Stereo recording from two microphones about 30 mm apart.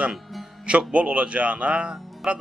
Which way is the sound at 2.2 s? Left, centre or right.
Right.